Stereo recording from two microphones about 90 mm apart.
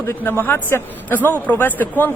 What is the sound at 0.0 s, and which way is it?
Speech, 25° left (ahead or behind).